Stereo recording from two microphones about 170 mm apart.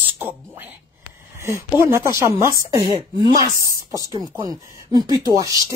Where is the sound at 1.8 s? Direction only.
15° right (ahead or behind).